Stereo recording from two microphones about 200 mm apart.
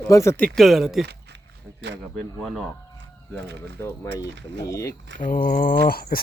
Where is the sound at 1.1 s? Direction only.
60° right (ahead or behind).